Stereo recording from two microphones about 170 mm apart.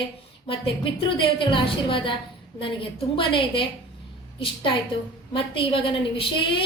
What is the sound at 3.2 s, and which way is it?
A woman's voice, 30° left (ahead or behind).